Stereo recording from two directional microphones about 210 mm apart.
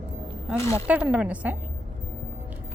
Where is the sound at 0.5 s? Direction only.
15° left (ahead or behind).